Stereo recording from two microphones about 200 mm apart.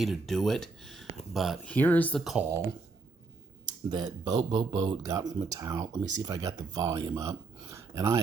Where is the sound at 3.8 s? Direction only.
20° right (ahead or behind).